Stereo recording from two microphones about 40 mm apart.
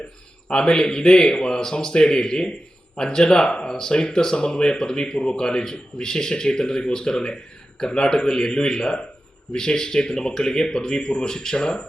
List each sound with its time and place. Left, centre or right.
0.4 s a man's voice: centre